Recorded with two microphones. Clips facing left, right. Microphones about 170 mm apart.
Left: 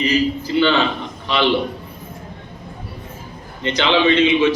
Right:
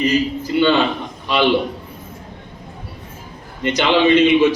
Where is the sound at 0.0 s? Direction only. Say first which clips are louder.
Even; 50° right (ahead or behind).